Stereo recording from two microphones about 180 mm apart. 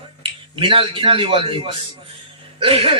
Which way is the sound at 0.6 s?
30° right (ahead or behind).